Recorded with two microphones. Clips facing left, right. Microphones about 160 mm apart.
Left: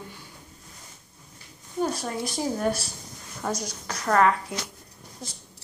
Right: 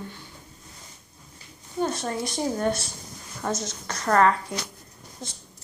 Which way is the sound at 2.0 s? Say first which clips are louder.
Right 1 dB; centre (ahead or behind).